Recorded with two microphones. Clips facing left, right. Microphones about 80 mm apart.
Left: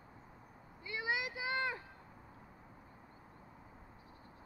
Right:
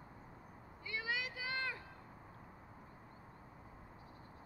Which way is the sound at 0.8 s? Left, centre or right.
Centre.